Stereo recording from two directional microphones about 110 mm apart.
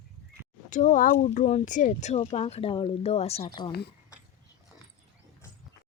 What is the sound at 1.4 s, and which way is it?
Speech, 90° left.